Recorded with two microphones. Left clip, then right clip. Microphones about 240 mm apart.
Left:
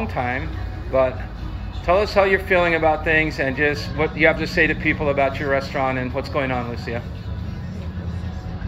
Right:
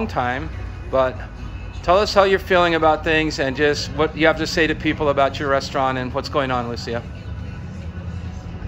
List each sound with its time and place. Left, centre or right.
0.0 s a man's voice: right